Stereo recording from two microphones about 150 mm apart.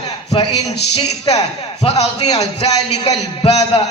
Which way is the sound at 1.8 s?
45° left (ahead or behind).